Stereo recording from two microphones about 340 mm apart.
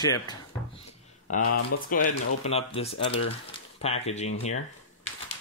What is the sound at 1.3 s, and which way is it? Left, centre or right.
Speech, left.